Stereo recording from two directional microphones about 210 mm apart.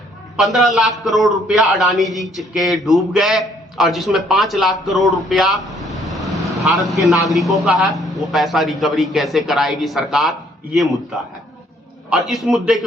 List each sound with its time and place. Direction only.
0.3 s a man's voice: centre (ahead or behind)